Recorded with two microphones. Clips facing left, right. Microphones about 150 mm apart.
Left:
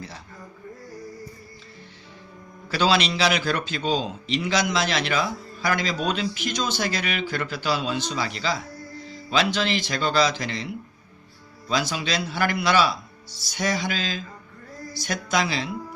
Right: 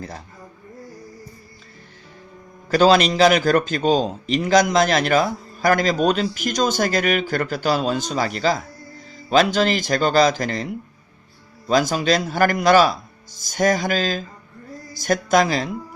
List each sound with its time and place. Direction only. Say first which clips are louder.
2.6 s a man's voice: right 7 dB; 45° right (ahead or behind)